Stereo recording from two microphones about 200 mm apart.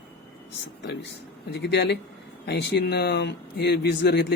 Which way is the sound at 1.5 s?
55° left (ahead or behind).